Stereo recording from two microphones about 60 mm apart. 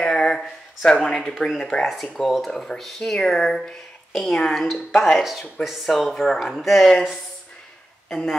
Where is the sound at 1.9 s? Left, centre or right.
Centre.